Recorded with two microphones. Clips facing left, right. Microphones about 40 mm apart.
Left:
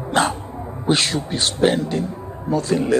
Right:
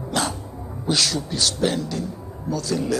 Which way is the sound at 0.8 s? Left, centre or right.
Left.